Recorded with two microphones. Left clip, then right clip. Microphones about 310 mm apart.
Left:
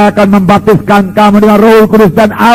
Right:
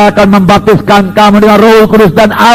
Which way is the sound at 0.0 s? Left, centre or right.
Right.